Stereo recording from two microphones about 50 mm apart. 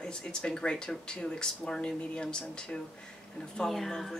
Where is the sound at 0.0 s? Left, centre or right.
Centre.